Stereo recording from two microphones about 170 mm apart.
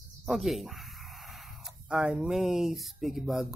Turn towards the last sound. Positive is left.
turn(degrees=0)  # may be behind; listen again after turning